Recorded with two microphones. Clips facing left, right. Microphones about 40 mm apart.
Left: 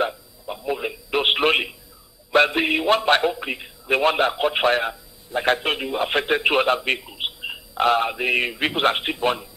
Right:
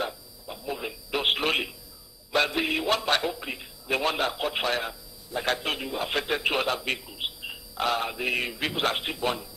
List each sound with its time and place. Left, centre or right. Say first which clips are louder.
0.0 s a man's voice: left 8 dB; left